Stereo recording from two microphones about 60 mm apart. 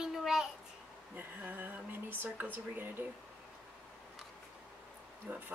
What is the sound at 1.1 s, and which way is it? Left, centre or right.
Speech, right.